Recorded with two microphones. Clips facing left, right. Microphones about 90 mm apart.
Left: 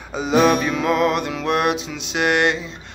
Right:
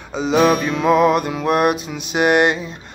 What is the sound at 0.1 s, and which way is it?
Music, 5° left (ahead or behind).